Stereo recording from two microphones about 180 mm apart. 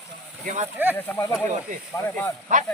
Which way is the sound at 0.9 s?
10° left (ahead or behind).